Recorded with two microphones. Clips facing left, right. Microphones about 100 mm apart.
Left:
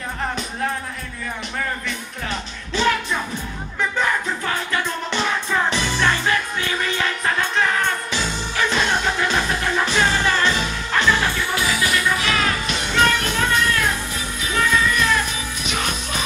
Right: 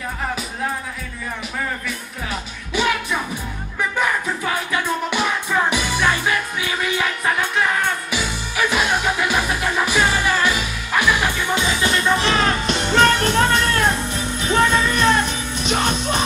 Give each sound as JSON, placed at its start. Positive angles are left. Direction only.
{"t": 2.7, "sound": "music", "side_deg": -15}
{"t": 5.1, "sound": "music", "side_deg": -10}